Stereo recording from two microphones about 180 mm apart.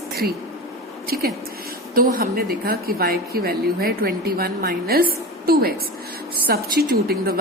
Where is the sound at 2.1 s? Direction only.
55° right (ahead or behind).